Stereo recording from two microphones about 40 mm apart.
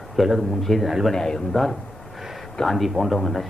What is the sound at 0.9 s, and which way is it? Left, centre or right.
Speech, centre.